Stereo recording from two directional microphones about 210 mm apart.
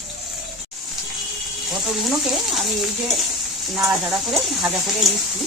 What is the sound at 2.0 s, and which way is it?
Speech, centre (ahead or behind).